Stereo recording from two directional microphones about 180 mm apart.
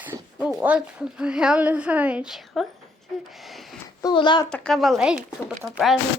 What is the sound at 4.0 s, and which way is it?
Speech, 25° left (ahead or behind).